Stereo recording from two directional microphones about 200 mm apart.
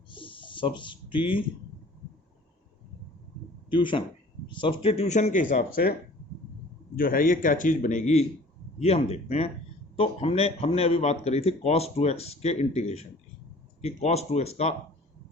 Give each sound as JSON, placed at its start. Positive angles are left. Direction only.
{"t": 0.1, "sound": "a sound", "side_deg": 25}
{"t": 3.7, "sound": "a man's voice", "side_deg": 25}
{"t": 6.9, "sound": "a man's voice", "side_deg": 45}